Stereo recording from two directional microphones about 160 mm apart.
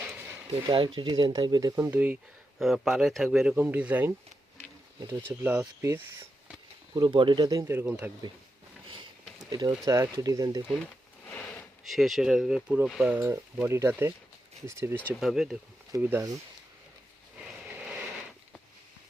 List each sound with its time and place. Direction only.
0.0 s a sound: 10° right (ahead or behind)
0.5 s speech: 35° right (ahead or behind)
1.8 s a man's voice: 10° right (ahead or behind)
6.9 s speech: 30° right (ahead or behind); by 8.1 s 10° right (ahead or behind)
9.5 s speech: 25° right (ahead or behind)
11.3 s a sound: 10° left (ahead or behind)
11.9 s speech: centre (ahead or behind); by 14.9 s 15° right (ahead or behind)
15.2 s a man's voice: centre (ahead or behind)
15.9 s speech: 15° right (ahead or behind)
17.3 s a sound: 10° right (ahead or behind)